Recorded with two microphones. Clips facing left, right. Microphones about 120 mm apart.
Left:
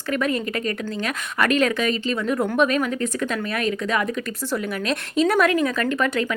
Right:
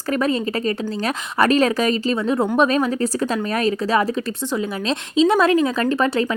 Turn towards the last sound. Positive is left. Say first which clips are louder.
# right 3 dB
turn(degrees=-30)  # may be behind; listen again after turning